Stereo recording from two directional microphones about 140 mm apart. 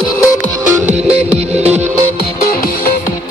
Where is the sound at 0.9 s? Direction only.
50° right (ahead or behind).